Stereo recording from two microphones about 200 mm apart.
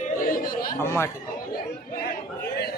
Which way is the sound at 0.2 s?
45° left (ahead or behind).